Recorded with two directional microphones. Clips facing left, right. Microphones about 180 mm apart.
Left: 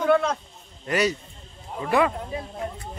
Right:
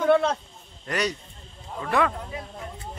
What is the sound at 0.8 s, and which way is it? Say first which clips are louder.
Speech: left 4 dB; 5° left (ahead or behind).